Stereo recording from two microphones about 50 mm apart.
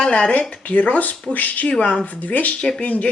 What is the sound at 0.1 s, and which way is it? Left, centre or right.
Speech, left.